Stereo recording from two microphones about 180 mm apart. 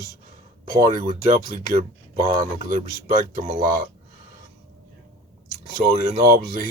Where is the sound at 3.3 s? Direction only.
45° right (ahead or behind).